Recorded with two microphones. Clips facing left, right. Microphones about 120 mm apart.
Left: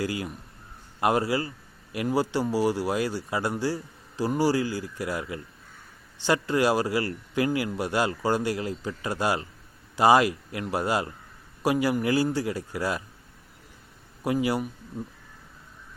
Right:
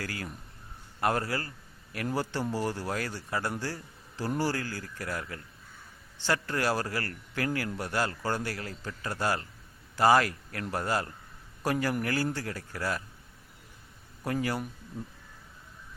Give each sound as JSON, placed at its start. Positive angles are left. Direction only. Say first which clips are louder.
{"t": 0.0, "sound": "speech", "louder": "left 8 dB", "side_deg": 15}
{"t": 14.3, "sound": "speech", "louder": "left 6 dB", "side_deg": 15}